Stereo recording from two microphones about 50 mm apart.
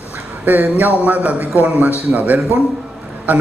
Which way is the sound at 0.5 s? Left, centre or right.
Right.